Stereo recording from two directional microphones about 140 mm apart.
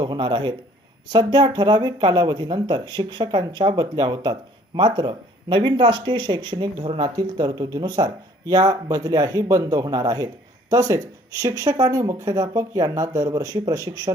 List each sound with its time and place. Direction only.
0.0 s speech: 30° right (ahead or behind)